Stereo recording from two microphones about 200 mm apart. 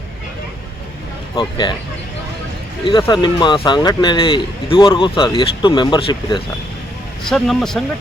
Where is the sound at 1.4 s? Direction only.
20° left (ahead or behind).